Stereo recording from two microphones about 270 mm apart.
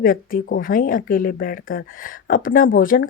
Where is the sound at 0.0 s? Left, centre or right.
Left.